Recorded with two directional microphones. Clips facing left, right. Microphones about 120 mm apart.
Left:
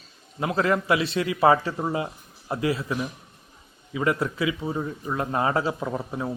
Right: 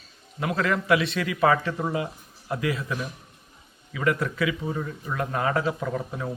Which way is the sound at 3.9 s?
25° left (ahead or behind).